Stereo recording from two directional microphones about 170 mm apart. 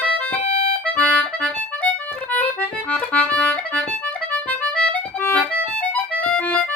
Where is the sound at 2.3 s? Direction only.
10° left (ahead or behind).